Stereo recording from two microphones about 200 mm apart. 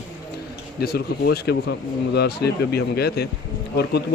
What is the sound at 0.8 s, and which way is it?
Speech, 50° left (ahead or behind).